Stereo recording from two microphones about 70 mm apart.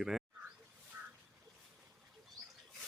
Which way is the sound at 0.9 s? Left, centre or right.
Right.